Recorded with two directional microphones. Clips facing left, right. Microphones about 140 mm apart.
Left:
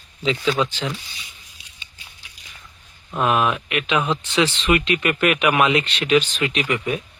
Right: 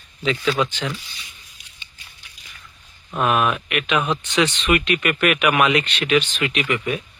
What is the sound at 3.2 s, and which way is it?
Speech, 20° left (ahead or behind).